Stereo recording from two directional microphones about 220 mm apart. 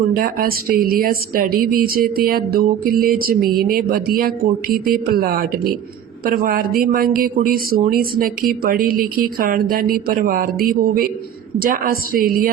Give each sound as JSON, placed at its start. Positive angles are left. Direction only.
{"t": 0.2, "sound": "speech", "side_deg": -40}